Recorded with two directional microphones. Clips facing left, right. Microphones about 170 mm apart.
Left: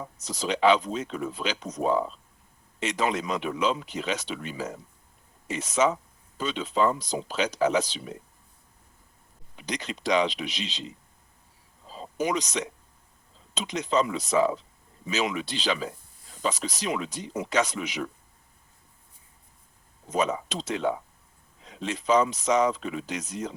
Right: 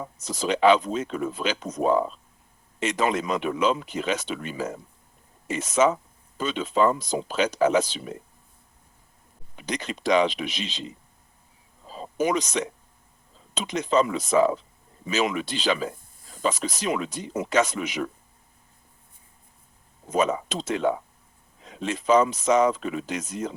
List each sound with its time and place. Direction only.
0.2 s speech: 50° right (ahead or behind)
9.6 s speech: 50° right (ahead or behind)
11.9 s a sound: 50° right (ahead or behind)
13.5 s speech: 50° right (ahead or behind)
20.1 s speech: 50° right (ahead or behind)